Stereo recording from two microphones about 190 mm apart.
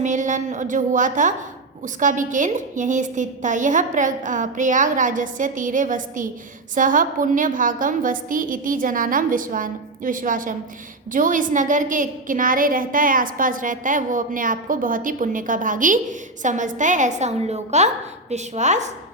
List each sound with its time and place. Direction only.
0.0 s a woman's voice: 40° right (ahead or behind)